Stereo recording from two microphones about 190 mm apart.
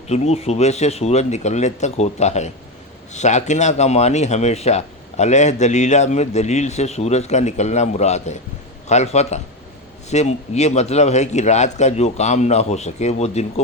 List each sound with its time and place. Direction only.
0.1 s speech: 35° left (ahead or behind)